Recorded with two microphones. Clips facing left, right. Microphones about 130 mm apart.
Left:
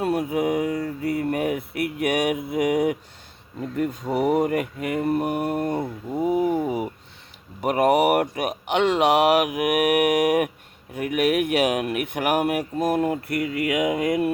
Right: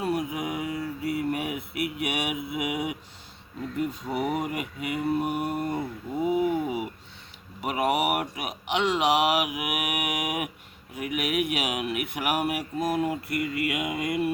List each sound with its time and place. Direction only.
0.0 s speech: 60° left (ahead or behind); by 6.9 s 40° left (ahead or behind)
7.6 s speech: 50° left (ahead or behind)